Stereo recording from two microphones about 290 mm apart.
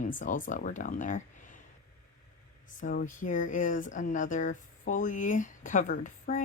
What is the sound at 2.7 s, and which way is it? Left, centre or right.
Speech, left.